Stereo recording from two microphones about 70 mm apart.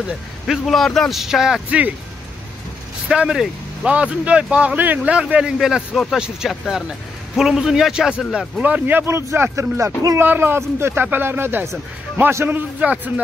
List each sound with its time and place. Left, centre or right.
0.5 s a man's voice: centre
1.2 s speech: centre
1.7 s a man's voice: centre
3.1 s speech: centre; by 5.1 s right
5.1 s a man's voice: centre; by 9.9 s right
10.1 s a man's voice: right